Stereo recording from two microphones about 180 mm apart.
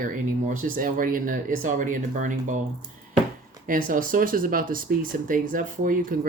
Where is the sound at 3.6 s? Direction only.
50° right (ahead or behind).